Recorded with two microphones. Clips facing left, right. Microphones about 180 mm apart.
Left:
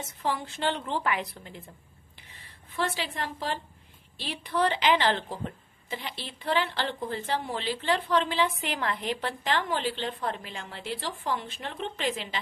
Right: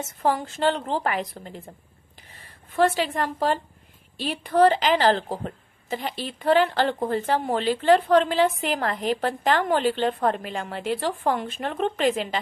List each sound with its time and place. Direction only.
0.2 s a woman's voice: 45° right (ahead or behind)
2.7 s a woman's voice: 45° right (ahead or behind)